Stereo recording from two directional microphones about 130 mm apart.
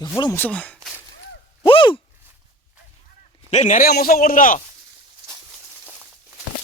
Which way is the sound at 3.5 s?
65° left (ahead or behind).